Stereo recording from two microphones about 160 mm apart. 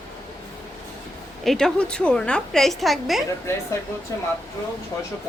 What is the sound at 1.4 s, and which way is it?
Speech, 5° left (ahead or behind).